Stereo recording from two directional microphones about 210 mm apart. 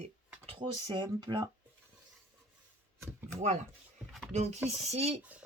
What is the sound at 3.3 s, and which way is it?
A woman's voice, 35° right (ahead or behind).